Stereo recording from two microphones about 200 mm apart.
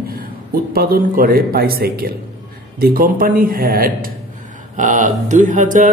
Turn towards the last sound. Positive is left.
turn(degrees=-40)  # may be behind; listen again after turning